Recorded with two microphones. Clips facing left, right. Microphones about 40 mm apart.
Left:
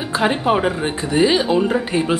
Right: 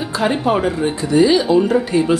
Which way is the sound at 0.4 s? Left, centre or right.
Left.